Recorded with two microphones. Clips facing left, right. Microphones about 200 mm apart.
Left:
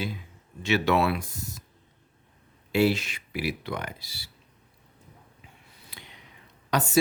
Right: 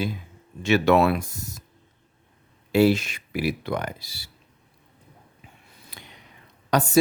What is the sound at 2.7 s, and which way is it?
Speech, 40° right (ahead or behind).